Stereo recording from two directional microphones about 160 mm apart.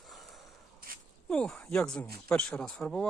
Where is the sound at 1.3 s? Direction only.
5° left (ahead or behind).